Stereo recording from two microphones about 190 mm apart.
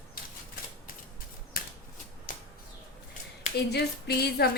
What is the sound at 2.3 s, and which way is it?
Bird flight, 50° left (ahead or behind).